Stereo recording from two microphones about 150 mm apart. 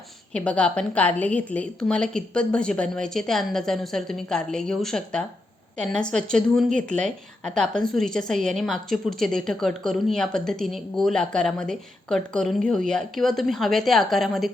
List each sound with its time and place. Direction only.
0.3 s a woman's voice: 10° left (ahead or behind)